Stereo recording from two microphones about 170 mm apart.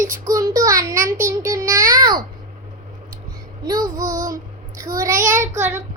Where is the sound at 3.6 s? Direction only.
20° right (ahead or behind).